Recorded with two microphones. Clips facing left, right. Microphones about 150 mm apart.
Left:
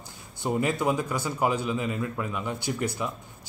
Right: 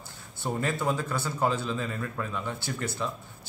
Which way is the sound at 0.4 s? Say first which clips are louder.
Left 4 dB; 15° left (ahead or behind).